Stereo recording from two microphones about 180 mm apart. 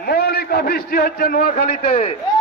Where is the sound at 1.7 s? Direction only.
35° left (ahead or behind).